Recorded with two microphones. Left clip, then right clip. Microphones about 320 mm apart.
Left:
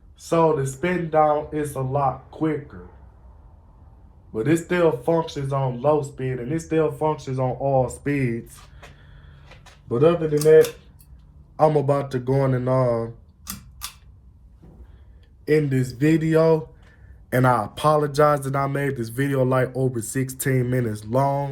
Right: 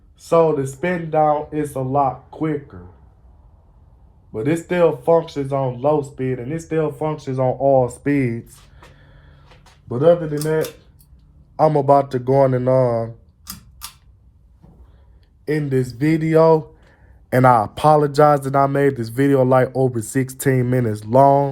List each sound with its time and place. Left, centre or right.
0.2 s speech: right
4.3 s speech: right
9.0 s a sound: centre
9.9 s speech: centre
13.4 s tick-tock: centre
15.4 s speech: centre